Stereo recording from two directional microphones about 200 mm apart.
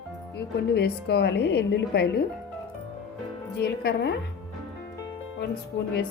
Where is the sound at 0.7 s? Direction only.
55° left (ahead or behind).